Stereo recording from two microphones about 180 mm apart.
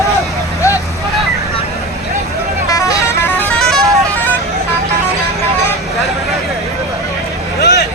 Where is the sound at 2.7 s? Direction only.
20° left (ahead or behind).